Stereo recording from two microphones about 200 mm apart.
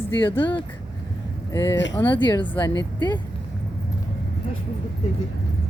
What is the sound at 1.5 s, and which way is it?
Speech, 15° left (ahead or behind).